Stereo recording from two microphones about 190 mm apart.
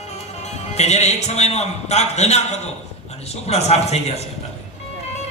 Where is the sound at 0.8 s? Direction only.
35° left (ahead or behind).